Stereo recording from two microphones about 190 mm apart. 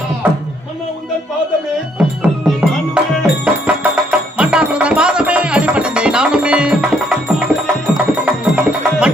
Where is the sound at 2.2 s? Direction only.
5° right (ahead or behind).